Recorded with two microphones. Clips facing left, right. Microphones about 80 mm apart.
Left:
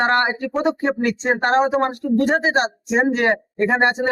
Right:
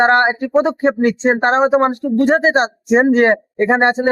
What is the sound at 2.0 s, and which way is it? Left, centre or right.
Speech, right.